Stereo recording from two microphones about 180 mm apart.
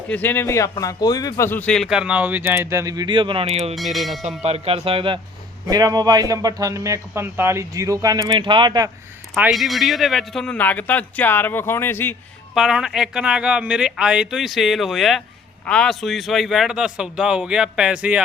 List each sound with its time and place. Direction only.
0.1 s speech: 10° left (ahead or behind); by 3.8 s 35° right (ahead or behind)
3.8 s speech: centre (ahead or behind)
4.4 s a man's voice: 35° right (ahead or behind)
9.3 s speech: centre (ahead or behind)
12.5 s speech: centre (ahead or behind)